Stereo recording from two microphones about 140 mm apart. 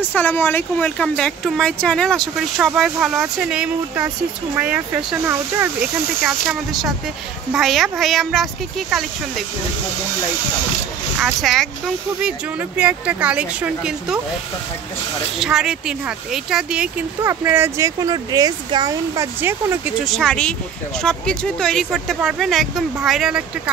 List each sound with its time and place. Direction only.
0.0 s speech: 15° left (ahead or behind); by 5.7 s 15° right (ahead or behind)
5.8 s speech: centre (ahead or behind)
11.1 s speech: 5° right (ahead or behind)
15.3 s speech: 5° right (ahead or behind); by 19.2 s 30° right (ahead or behind)
20.1 s speech: 5° left (ahead or behind)